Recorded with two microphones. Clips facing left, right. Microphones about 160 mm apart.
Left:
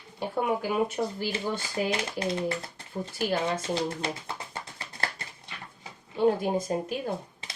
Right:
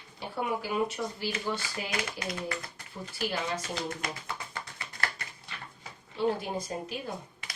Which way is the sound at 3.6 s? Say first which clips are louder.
Left 6 dB; 30° left (ahead or behind).